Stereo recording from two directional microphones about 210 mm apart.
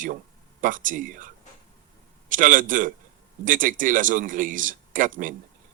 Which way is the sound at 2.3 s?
40° right (ahead or behind).